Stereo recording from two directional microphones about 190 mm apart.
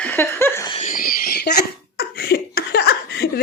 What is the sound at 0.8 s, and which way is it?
Laughter, 45° left (ahead or behind).